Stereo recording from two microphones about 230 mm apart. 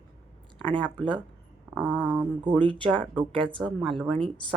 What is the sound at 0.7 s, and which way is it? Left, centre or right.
Speech, centre.